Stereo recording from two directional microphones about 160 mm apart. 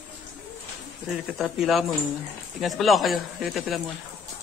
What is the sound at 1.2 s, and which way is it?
Speech, centre (ahead or behind).